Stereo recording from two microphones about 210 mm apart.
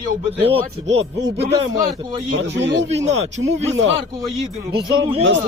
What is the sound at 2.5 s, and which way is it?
Speech, 60° right (ahead or behind).